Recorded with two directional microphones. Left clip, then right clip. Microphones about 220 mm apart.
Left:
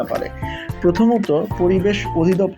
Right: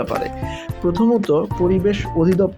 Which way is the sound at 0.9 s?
15° right (ahead or behind).